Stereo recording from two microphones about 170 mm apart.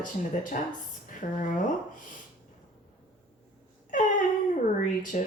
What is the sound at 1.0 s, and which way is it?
Speech, 50° left (ahead or behind).